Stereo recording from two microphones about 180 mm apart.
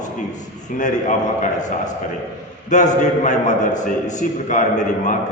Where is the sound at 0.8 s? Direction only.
45° left (ahead or behind).